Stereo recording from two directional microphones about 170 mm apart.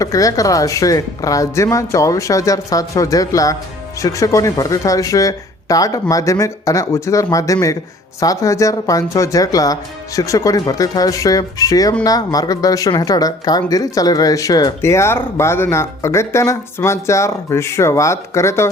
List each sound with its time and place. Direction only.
0.0 s speech: 20° left (ahead or behind)